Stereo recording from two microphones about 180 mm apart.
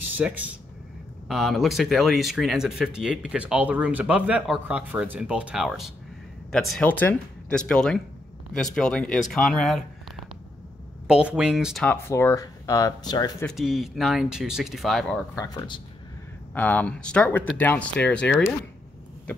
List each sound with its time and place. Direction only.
0.2 s speech: 10° right (ahead or behind)
11.1 s speech: 5° right (ahead or behind); by 13.5 s 20° left (ahead or behind)
13.5 s speech: centre (ahead or behind)
15.3 s speech: 20° left (ahead or behind)
16.5 s speech: 10° left (ahead or behind)